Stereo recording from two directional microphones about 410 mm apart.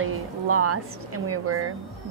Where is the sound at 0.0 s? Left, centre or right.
Right.